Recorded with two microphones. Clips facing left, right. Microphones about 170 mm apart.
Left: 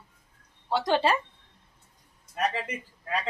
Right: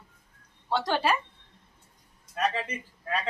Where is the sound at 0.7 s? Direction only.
20° left (ahead or behind).